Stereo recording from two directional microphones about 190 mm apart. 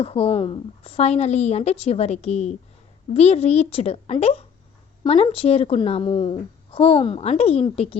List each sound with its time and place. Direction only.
0.0 s a woman's voice: 30° left (ahead or behind)